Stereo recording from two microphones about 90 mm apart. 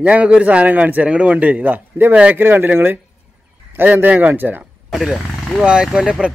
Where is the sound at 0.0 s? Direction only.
15° right (ahead or behind).